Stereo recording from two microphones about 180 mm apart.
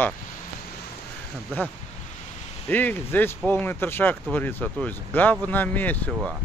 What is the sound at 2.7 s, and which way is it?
Speech, 10° left (ahead or behind).